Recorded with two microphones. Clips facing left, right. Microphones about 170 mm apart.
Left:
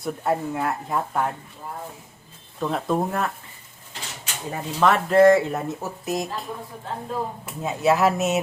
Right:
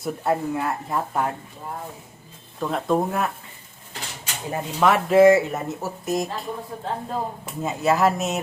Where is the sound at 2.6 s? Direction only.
Centre (ahead or behind).